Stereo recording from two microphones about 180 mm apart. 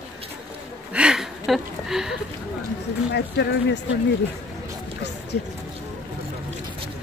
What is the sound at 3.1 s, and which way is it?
Speech, 70° left (ahead or behind).